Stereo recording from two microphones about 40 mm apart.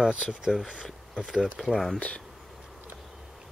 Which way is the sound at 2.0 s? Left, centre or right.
Left.